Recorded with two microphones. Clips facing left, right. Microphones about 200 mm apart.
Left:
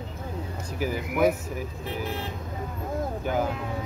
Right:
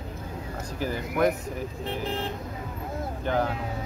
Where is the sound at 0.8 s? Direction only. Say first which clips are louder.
Left 1 dB; 10° left (ahead or behind).